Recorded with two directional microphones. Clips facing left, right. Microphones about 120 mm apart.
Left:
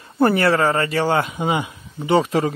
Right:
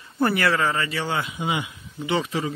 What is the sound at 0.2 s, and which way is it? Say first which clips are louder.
A man's voice: left 5 dB; 35° left (ahead or behind).